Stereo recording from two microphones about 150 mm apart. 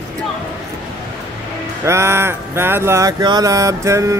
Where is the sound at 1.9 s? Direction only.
15° right (ahead or behind).